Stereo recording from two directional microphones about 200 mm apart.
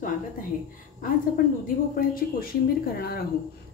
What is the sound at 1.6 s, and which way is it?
Speech, 45° left (ahead or behind).